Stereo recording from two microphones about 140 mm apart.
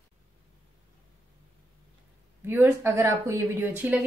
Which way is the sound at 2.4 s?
15° right (ahead or behind).